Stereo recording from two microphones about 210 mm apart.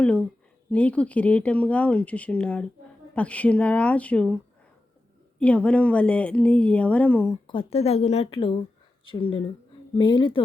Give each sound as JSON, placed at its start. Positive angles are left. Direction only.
{"t": 0.0, "sound": "speech", "side_deg": 5}
{"t": 5.4, "sound": "speech", "side_deg": 5}
{"t": 7.4, "sound": "speech", "side_deg": 25}